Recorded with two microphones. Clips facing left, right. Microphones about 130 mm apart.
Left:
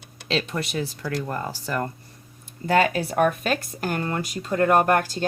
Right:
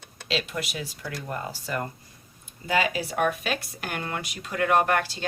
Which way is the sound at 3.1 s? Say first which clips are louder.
Left 5 dB; 45° left (ahead or behind).